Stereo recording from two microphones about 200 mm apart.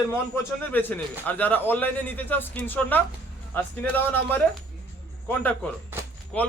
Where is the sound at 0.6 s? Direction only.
10° left (ahead or behind).